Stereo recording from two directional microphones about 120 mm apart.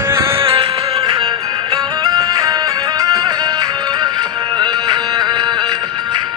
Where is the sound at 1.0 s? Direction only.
35° right (ahead or behind).